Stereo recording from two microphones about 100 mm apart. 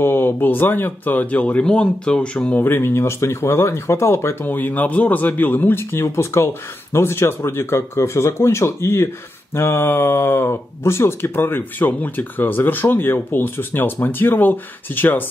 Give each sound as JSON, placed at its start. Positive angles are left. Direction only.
{"t": 0.0, "sound": "speech", "side_deg": 20}